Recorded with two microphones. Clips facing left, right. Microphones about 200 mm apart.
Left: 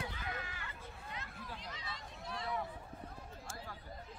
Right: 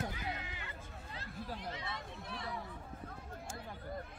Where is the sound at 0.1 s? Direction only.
20° right (ahead or behind).